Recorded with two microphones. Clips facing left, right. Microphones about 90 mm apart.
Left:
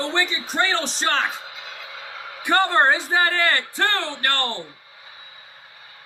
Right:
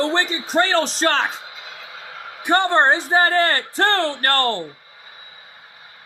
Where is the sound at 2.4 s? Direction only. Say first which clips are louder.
Right 2 dB; 20° right (ahead or behind); by 4.6 s 40° right (ahead or behind).